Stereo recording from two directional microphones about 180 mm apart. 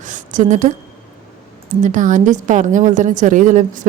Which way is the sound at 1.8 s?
45° right (ahead or behind).